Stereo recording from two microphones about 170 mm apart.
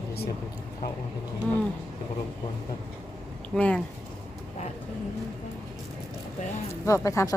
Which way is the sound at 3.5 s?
5° left (ahead or behind).